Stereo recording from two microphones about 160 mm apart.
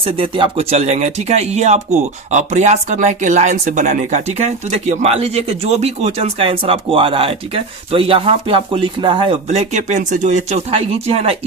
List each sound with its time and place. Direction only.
0.0 s speech: 35° right (ahead or behind)